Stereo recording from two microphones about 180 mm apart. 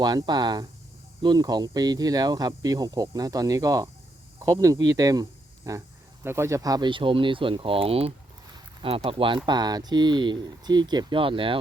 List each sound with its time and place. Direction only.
0.0 s a man's voice: 25° right (ahead or behind)